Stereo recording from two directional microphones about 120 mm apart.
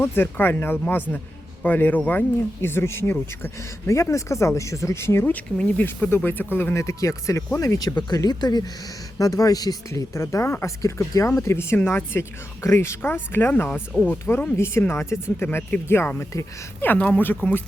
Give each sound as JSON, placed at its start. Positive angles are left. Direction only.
{"t": 0.0, "sound": "speech", "side_deg": 20}